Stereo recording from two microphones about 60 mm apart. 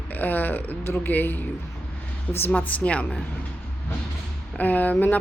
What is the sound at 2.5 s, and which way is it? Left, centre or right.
Speech, left.